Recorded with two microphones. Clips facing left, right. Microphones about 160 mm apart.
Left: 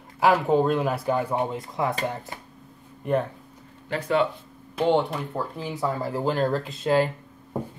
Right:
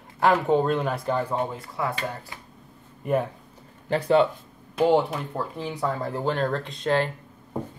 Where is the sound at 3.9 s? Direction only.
35° right (ahead or behind).